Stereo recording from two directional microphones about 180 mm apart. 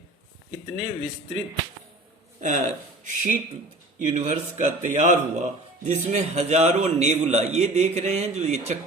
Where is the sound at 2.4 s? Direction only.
45° right (ahead or behind).